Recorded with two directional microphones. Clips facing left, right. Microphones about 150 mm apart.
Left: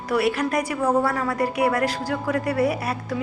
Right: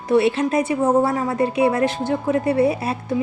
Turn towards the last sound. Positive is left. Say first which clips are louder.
# right 4 dB
turn(degrees=-25)  # may be behind; listen again after turning